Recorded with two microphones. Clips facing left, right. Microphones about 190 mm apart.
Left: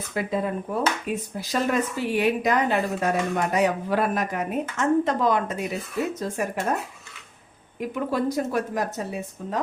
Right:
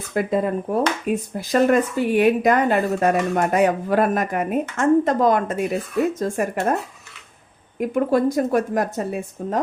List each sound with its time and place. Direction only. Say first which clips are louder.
0.1 s speech: right 6 dB; 50° right (ahead or behind)
7.8 s speech: right 7 dB; 50° right (ahead or behind)